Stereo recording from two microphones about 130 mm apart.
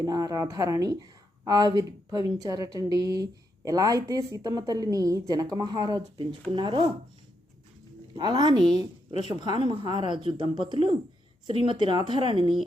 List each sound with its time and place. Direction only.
0.0 s a woman's voice: 25° right (ahead or behind)
8.1 s speech: 35° right (ahead or behind)